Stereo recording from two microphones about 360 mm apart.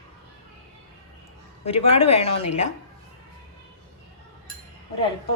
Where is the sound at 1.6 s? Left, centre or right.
Centre.